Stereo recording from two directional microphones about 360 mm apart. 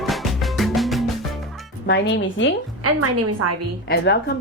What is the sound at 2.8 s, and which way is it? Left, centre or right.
Speech, right.